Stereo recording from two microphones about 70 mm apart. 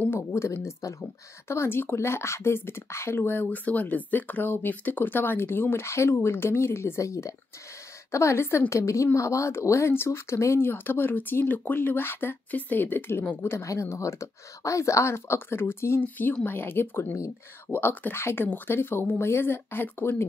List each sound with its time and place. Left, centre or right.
0.1 s a woman's voice: left